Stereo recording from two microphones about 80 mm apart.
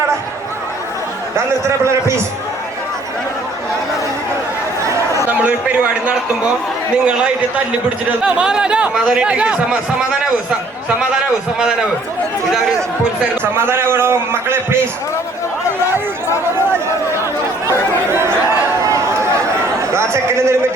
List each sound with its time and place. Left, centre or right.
1.6 s a man's voice: right
5.3 s a man's voice: centre
13.4 s a man's voice: right
17.7 s chatter: right
18.9 s a sound: right
19.9 s speech: right